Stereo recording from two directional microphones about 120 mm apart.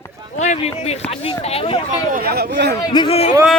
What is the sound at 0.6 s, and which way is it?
Speech, 60° left (ahead or behind).